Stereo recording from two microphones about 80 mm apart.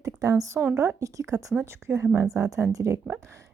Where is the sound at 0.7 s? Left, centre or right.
Right.